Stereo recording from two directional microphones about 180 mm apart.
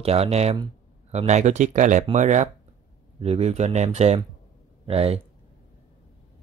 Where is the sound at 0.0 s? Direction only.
35° right (ahead or behind).